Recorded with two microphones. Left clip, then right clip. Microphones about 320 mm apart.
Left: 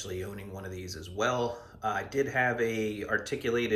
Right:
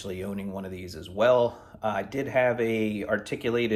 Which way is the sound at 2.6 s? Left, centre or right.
Right.